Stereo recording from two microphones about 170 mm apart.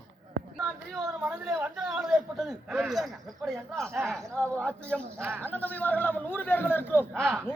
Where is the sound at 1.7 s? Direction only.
5° right (ahead or behind).